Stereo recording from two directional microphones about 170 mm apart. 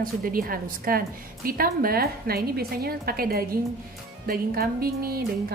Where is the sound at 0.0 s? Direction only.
55° right (ahead or behind).